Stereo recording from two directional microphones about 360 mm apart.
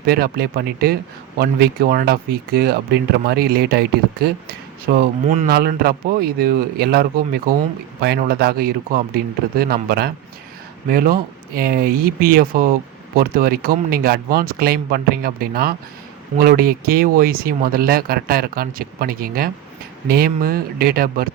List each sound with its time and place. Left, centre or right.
0.0 s speech: right